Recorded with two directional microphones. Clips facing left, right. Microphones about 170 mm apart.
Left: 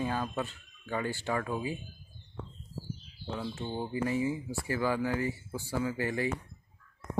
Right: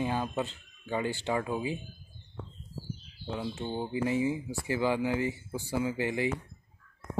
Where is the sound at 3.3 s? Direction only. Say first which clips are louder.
Right 2 dB; 15° right (ahead or behind).